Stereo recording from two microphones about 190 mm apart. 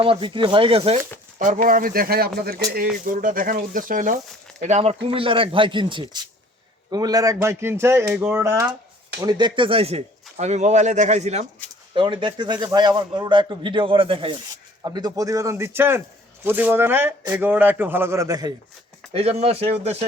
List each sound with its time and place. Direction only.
0.0 s a man's voice: 30° right (ahead or behind)
1.6 s a man's voice: 45° right (ahead or behind); by 8.7 s 15° right (ahead or behind)
9.2 s speech: 25° right (ahead or behind)
11.9 s a man's voice: 25° right (ahead or behind)
19.1 s speech: 30° right (ahead or behind)